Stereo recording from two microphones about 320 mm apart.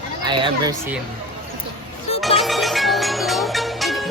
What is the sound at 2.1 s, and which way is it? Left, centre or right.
Music, centre.